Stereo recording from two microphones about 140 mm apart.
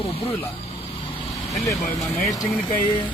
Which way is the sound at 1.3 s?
Centre (ahead or behind).